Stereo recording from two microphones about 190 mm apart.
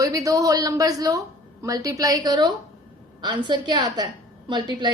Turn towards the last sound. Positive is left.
turn(degrees=-25)  # may be behind; listen again after turning